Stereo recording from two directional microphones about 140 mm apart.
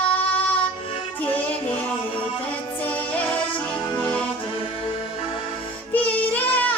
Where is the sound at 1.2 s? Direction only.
10° left (ahead or behind).